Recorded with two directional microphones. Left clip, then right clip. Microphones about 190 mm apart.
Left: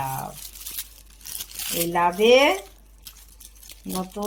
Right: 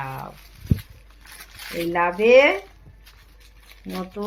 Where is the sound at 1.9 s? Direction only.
90° left.